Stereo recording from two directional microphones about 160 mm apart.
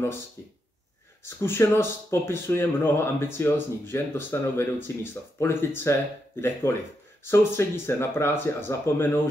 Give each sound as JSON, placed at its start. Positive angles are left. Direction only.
{"t": 0.4, "sound": "speech", "side_deg": 15}